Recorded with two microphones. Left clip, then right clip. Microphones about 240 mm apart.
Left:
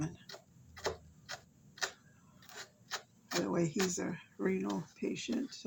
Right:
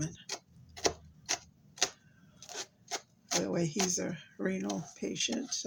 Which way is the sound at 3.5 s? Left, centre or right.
Right.